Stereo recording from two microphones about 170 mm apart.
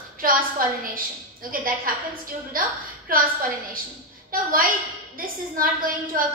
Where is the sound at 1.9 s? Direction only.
55° right (ahead or behind).